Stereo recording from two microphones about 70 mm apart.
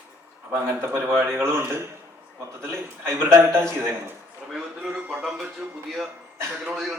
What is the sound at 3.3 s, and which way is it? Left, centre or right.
Speech, right.